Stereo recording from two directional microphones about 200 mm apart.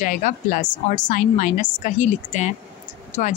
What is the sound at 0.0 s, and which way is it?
Speech, 40° left (ahead or behind).